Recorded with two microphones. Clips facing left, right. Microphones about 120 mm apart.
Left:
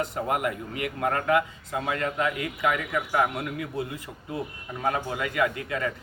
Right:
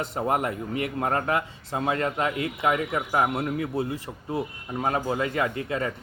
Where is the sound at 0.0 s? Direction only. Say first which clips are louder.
Right 1 dB; 35° right (ahead or behind).